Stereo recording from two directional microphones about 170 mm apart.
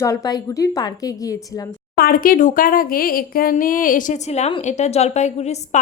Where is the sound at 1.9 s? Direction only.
60° left (ahead or behind).